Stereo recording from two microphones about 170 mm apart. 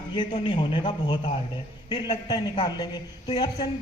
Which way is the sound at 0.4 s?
25° left (ahead or behind).